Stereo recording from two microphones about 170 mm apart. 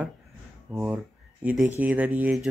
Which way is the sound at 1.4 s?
10° right (ahead or behind).